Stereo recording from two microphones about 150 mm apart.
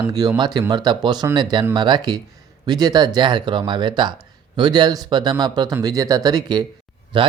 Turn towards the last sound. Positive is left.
turn(degrees=-30)  # may be behind; listen again after turning